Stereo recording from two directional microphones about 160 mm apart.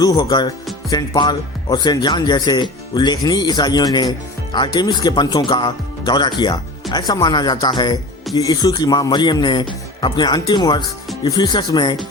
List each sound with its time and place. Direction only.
0.2 s speech: 25° left (ahead or behind)